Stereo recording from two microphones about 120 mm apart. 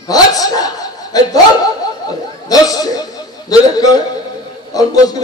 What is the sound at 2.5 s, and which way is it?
Speech, 30° left (ahead or behind).